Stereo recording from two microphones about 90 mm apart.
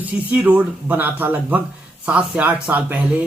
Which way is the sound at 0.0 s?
20° right (ahead or behind).